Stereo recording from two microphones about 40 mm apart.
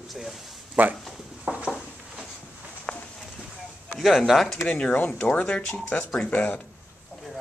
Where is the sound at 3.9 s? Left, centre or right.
Centre.